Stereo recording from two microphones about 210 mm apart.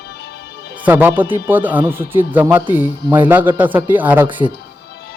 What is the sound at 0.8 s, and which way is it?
Speech, 10° right (ahead or behind).